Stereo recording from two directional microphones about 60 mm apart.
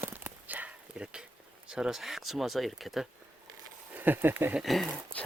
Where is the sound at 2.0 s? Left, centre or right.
Centre.